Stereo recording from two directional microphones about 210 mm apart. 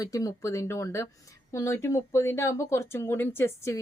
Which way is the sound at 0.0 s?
15° left (ahead or behind).